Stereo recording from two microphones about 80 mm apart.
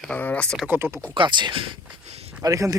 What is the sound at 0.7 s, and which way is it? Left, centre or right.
Speech, right.